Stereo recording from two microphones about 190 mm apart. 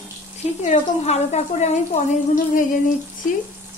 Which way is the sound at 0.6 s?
35° left (ahead or behind).